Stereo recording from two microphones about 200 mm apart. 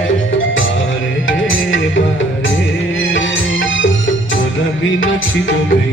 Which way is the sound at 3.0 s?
70° left (ahead or behind).